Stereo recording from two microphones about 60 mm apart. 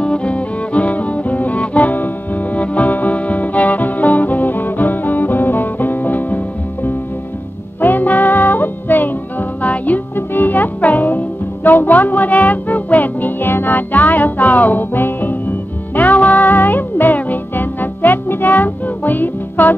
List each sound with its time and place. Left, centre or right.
0.0 s music: centre